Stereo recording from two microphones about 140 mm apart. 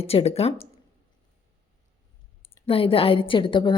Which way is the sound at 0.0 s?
45° left (ahead or behind).